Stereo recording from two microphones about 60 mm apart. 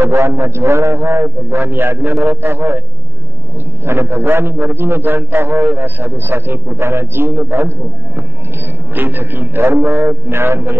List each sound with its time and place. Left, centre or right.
0.0 s a man's voice: right
3.8 s a man's voice: right
8.9 s a man's voice: right